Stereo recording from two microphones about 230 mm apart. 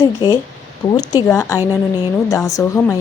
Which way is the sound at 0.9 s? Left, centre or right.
Centre.